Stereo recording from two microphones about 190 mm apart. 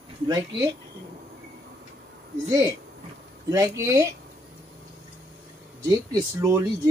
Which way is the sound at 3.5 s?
15° right (ahead or behind).